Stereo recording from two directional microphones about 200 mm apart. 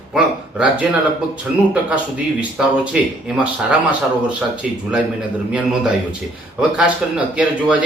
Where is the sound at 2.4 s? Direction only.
5° right (ahead or behind).